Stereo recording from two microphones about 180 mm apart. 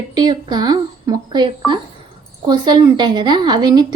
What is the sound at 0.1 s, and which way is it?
A woman's voice, 25° right (ahead or behind).